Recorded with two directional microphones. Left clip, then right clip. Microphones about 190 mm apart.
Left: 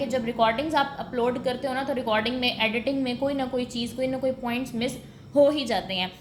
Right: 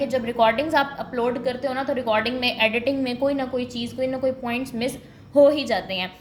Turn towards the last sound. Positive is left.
turn(degrees=-10)  # may be behind; listen again after turning